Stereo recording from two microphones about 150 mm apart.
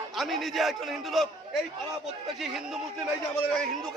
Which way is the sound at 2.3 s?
5° right (ahead or behind).